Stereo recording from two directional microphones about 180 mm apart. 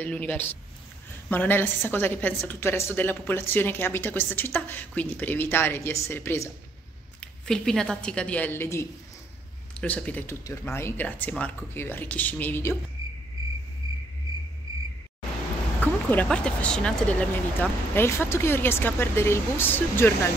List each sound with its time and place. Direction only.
0.0 s a woman's voice: 10° left (ahead or behind)
7.2 s a woman's voice: 5° left (ahead or behind)
13.8 s cricket: 20° right (ahead or behind)
15.8 s a woman's voice: 10° left (ahead or behind)